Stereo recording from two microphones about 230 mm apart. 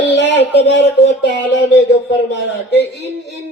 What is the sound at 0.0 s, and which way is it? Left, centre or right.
Speech, left.